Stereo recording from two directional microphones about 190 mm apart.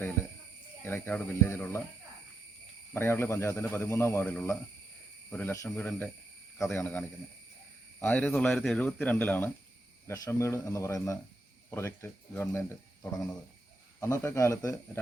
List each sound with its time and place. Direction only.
0.9 s speech: 10° left (ahead or behind)
2.9 s speech: 15° left (ahead or behind)